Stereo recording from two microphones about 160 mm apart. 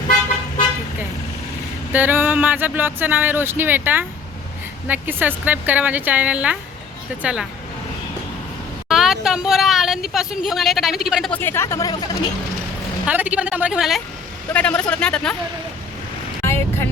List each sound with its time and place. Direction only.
1.9 s speech: 10° right (ahead or behind)
8.9 s speech: 5° right (ahead or behind)
11.3 s speech: 10° left (ahead or behind)
13.1 s speech: 10° right (ahead or behind)
14.5 s speech: 10° left (ahead or behind)
16.4 s vehicle: 15° left (ahead or behind)